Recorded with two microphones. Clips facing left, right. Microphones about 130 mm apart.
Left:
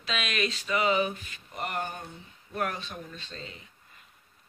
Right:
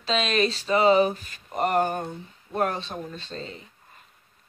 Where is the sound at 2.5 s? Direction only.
30° right (ahead or behind).